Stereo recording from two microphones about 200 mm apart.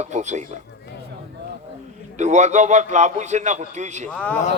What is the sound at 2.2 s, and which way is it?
A man's voice, 35° right (ahead or behind).